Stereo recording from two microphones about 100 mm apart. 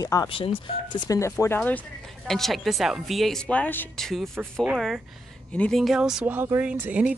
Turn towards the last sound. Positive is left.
turn(degrees=-15)  # may be behind; listen again after turning